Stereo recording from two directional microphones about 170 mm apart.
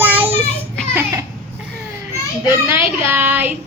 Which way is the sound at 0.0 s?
10° right (ahead or behind).